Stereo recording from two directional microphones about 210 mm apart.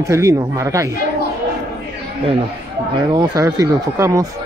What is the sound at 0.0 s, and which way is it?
Speech, 15° right (ahead or behind).